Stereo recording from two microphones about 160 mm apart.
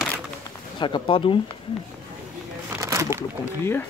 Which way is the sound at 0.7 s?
30° left (ahead or behind).